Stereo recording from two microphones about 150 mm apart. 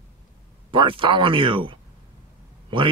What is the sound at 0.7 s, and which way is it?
Speech, 35° right (ahead or behind).